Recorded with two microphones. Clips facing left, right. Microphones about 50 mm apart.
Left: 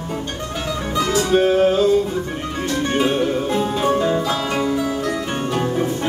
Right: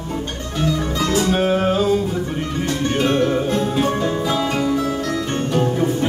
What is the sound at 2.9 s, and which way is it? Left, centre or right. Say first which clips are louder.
Music: right 1 dB; centre.